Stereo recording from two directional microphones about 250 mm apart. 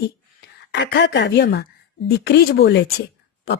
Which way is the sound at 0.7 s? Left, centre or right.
Left.